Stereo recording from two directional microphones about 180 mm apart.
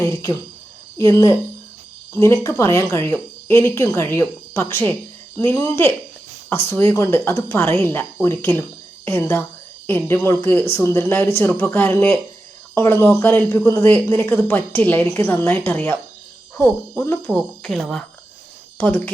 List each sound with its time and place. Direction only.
0.0 s speech: 20° left (ahead or behind)